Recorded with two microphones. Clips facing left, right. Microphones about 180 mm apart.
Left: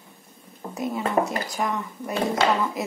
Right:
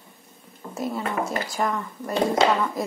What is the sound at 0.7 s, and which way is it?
Speech, centre (ahead or behind).